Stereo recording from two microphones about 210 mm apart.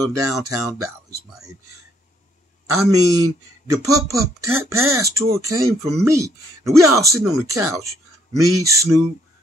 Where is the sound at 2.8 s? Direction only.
15° right (ahead or behind).